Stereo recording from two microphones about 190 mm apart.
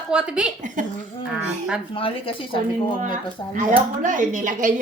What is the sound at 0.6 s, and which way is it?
Speech, 45° right (ahead or behind).